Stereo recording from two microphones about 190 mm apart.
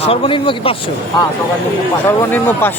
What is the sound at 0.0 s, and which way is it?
Speech, 30° left (ahead or behind).